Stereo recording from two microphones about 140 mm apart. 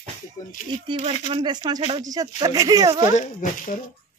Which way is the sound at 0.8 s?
40° right (ahead or behind).